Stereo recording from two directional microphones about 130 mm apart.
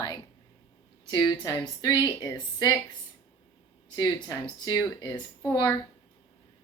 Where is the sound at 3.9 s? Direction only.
30° left (ahead or behind).